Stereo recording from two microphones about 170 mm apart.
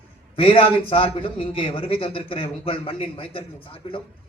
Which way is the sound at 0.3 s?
35° left (ahead or behind).